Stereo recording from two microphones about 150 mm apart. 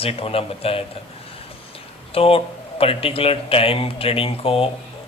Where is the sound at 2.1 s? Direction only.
40° left (ahead or behind).